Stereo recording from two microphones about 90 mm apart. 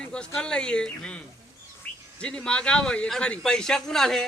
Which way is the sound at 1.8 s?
15° left (ahead or behind).